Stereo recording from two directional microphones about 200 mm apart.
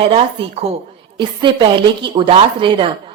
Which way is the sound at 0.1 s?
30° right (ahead or behind).